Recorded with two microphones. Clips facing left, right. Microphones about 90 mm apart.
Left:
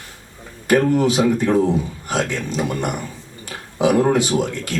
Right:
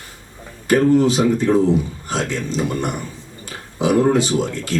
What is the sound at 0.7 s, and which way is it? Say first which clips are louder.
Speech: right 2 dB; 60° left (ahead or behind).